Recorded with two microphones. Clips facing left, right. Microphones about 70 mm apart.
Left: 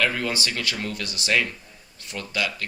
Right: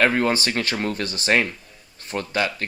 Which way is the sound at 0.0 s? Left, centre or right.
Right.